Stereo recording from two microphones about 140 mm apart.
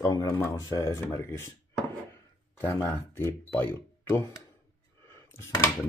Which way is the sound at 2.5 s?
15° left (ahead or behind).